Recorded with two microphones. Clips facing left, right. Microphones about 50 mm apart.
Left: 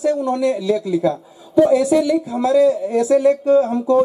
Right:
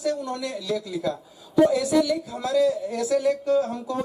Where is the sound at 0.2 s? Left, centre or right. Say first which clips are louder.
Left 12 dB; left.